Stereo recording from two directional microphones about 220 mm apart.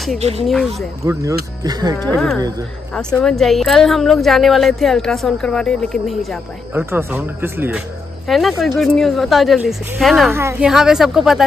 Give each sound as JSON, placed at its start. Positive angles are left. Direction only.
{"t": 0.2, "sound": "speech", "side_deg": -25}
{"t": 0.5, "sound": "a woman's voice", "side_deg": 0}
{"t": 1.0, "sound": "speech", "side_deg": -15}
{"t": 2.1, "sound": "a woman's voice", "side_deg": 5}
{"t": 6.7, "sound": "a woman's voice", "side_deg": -10}
{"t": 10.3, "sound": "a woman's voice", "side_deg": -10}